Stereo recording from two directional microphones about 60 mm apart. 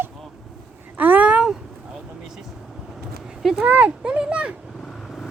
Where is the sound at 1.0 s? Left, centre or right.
Right.